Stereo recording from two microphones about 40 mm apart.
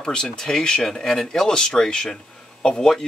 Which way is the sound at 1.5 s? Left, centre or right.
Left.